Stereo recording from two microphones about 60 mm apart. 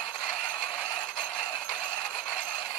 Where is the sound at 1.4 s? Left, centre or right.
Left.